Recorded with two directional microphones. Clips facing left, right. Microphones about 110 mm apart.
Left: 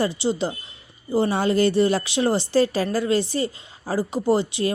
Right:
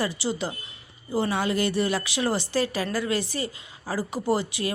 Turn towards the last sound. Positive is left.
turn(degrees=25)  # may be behind; listen again after turning